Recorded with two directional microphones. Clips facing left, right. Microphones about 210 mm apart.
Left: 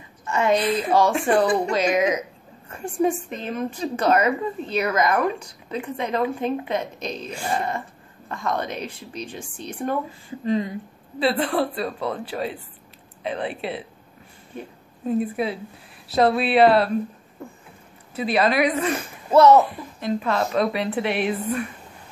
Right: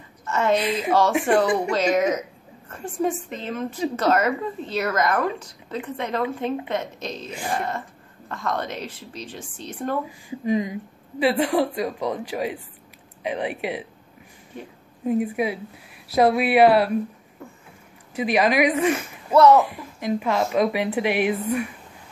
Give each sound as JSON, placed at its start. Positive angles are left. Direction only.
{"t": 0.2, "sound": "a woman's voice", "side_deg": 15}
{"t": 0.6, "sound": "a woman's voice", "side_deg": -10}
{"t": 1.7, "sound": "speech", "side_deg": 15}
{"t": 7.2, "sound": "speech", "side_deg": -20}
{"t": 7.5, "sound": "speech", "side_deg": 15}
{"t": 10.0, "sound": "a woman's voice", "side_deg": -15}
{"t": 15.0, "sound": "a woman's voice", "side_deg": -15}
{"t": 18.1, "sound": "a woman's voice", "side_deg": -15}
{"t": 19.3, "sound": "a child's voice", "side_deg": 20}
{"t": 19.6, "sound": "a woman's voice", "side_deg": -15}